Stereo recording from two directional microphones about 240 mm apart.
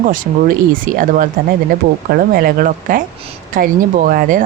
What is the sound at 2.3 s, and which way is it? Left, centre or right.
Speech, right.